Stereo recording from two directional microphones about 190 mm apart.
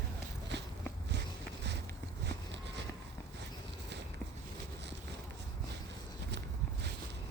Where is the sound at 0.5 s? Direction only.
65° right (ahead or behind).